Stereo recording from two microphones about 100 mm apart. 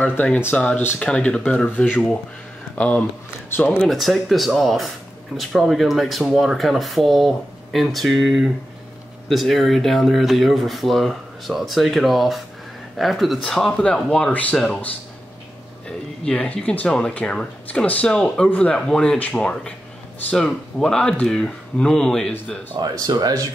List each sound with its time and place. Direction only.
0.0 s speech: 15° left (ahead or behind)
3.8 s speech: centre (ahead or behind)
16.3 s speech: 10° left (ahead or behind)
22.8 s speech: 40° right (ahead or behind)